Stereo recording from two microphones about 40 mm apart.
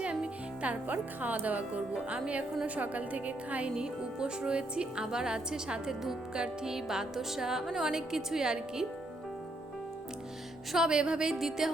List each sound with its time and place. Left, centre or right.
0.0 s a woman's voice: right
3.8 s speech: right
5.9 s music: centre
10.8 s speech: centre
11.3 s music: centre